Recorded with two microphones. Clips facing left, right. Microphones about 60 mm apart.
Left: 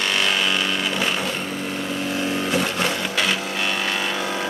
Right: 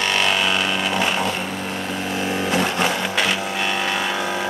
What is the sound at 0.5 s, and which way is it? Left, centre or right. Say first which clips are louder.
Vehicle: right 2 dB; right.